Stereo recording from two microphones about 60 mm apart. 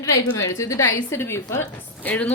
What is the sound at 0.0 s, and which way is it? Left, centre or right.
A woman's voice, left.